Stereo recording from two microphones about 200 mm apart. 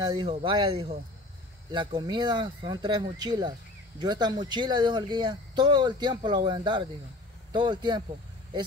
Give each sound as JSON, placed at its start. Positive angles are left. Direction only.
{"t": 0.0, "sound": "speech", "side_deg": -20}